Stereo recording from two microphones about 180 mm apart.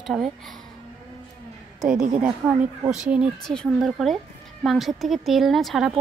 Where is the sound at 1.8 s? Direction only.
5° right (ahead or behind).